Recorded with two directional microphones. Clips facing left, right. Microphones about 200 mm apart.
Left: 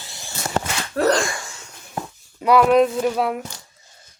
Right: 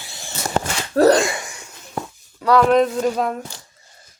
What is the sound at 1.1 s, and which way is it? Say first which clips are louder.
Wheeze: right 3 dB; 20° right (ahead or behind).